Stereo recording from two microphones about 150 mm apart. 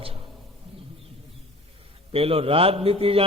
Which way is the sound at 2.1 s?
40° right (ahead or behind).